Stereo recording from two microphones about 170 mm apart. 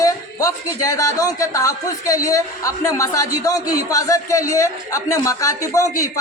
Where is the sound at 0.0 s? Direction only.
20° left (ahead or behind).